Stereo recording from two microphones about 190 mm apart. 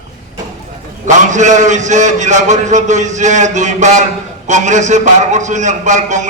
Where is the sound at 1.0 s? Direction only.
40° right (ahead or behind).